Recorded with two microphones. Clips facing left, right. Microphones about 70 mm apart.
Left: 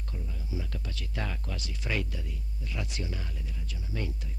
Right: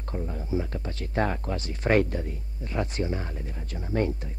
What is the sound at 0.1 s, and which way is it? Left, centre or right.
Speech, right.